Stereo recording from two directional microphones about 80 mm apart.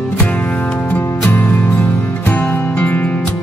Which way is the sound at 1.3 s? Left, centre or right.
Left.